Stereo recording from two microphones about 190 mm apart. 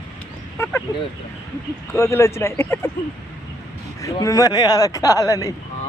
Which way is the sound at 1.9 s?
15° left (ahead or behind).